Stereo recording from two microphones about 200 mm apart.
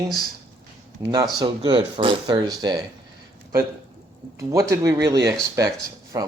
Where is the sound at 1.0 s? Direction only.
20° right (ahead or behind).